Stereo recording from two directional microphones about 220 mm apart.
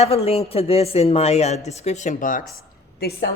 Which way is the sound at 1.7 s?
30° left (ahead or behind).